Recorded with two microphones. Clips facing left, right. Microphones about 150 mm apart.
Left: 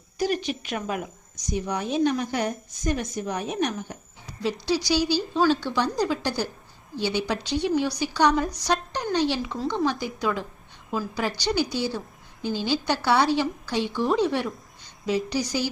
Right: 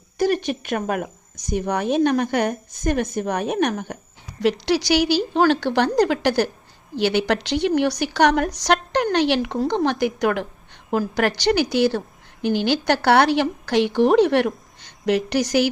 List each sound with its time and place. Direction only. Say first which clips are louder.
0.2 s a woman's voice: right 5 dB; 55° right (ahead or behind)
4.4 s a woman's voice: right 6 dB; 80° right
9.1 s a woman's voice: right 2 dB; 75° right (ahead or behind)